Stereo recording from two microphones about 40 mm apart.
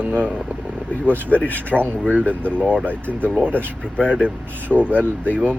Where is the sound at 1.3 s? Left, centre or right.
Left.